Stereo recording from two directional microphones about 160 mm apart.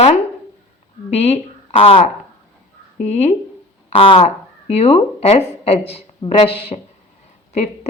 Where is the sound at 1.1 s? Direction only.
40° left (ahead or behind).